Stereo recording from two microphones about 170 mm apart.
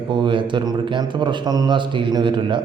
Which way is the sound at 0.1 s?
30° right (ahead or behind).